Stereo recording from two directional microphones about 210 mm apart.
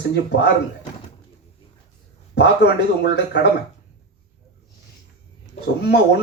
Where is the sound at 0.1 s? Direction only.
55° left (ahead or behind).